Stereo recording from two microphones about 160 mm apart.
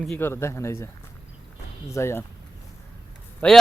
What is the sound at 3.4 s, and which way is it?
Speech, 10° left (ahead or behind).